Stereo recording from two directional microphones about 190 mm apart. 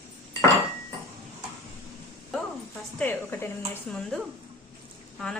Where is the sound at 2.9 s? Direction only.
10° left (ahead or behind).